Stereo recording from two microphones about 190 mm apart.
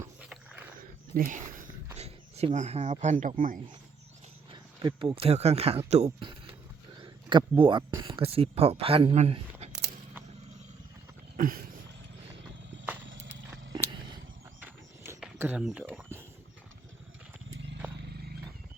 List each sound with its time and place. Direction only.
0.0 s roaring cats: 5° right (ahead or behind)
0.8 s a sound: 50° right (ahead or behind)
2.0 s speech: 35° right (ahead or behind)
4.5 s speech: 25° right (ahead or behind)
11.3 s a sound: 45° right (ahead or behind)
14.6 s horse: 15° right (ahead or behind)
15.2 s a sound: 5° right (ahead or behind)
17.5 s wild animals: 75° right (ahead or behind)
18.0 s wild animals: 55° right (ahead or behind)